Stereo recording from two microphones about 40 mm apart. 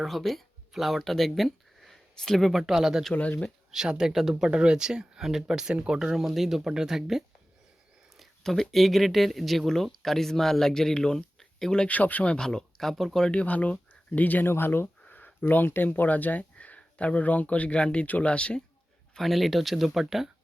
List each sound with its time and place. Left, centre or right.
0.0 s speech: centre
2.7 s speech: centre
4.4 s speech: right
6.1 s speech: centre
8.1 s a sound: centre
8.7 s speech: centre
11.9 s speech: left
12.4 s speech: centre
13.3 s speech: left
14.4 s speech: left
15.1 s a sound: left
16.0 s speech: left
19.1 s speech: centre